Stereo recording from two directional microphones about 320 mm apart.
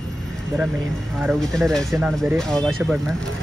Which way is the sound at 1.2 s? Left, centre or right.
Centre.